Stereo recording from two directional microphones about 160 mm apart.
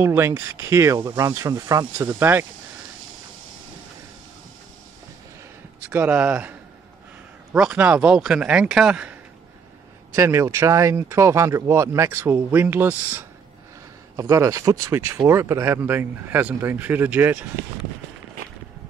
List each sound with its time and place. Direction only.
0.0 s speech: 15° right (ahead or behind)
5.8 s speech: 10° right (ahead or behind)
7.5 s a man's voice: 5° right (ahead or behind)
10.1 s speech: 15° right (ahead or behind)